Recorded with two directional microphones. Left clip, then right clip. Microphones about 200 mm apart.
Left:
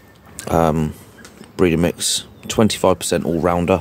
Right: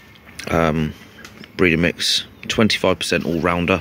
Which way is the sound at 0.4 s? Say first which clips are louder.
Left 2 dB; 15° left (ahead or behind).